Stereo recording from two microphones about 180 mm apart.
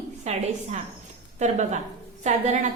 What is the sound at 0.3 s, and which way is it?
A woman's voice, 40° right (ahead or behind).